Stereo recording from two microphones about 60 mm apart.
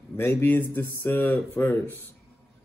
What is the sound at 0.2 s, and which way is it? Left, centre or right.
Mantra, left.